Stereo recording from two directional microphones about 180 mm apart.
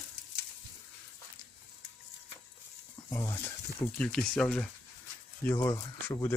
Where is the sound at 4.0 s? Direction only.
5° left (ahead or behind).